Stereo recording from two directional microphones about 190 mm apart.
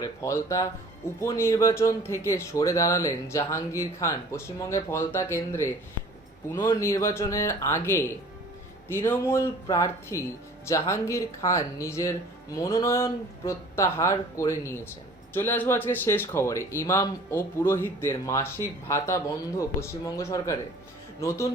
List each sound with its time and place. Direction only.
0.0 s speech: 15° left (ahead or behind)